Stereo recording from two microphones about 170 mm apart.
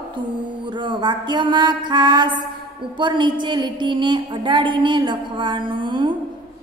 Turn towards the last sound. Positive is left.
turn(degrees=-30)  # may be behind; listen again after turning